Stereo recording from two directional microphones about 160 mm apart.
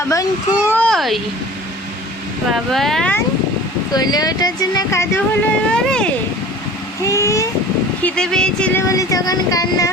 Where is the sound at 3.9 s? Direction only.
25° left (ahead or behind).